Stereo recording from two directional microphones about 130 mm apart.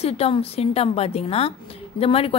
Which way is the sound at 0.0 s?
50° left (ahead or behind).